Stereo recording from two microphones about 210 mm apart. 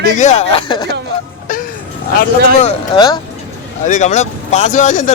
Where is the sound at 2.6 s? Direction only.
25° left (ahead or behind).